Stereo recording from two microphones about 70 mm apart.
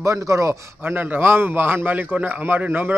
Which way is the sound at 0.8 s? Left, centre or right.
Right.